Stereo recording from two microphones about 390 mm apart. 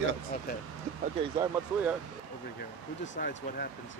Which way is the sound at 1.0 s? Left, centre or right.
Centre.